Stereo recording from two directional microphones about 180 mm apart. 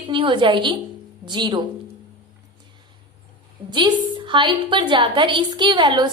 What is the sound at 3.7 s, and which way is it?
A woman's voice, 25° right (ahead or behind).